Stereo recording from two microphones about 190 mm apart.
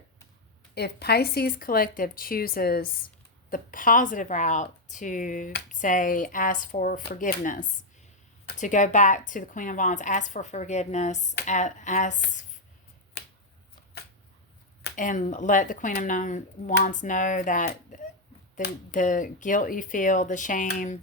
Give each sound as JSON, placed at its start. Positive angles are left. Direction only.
{"t": 0.7, "sound": "a woman's voice", "side_deg": 60}
{"t": 14.9, "sound": "speech", "side_deg": 40}